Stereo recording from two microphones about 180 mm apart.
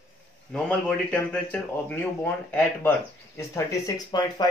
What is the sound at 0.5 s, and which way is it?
A man's voice, 5° left (ahead or behind).